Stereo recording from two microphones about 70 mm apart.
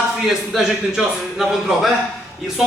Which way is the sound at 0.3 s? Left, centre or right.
Centre.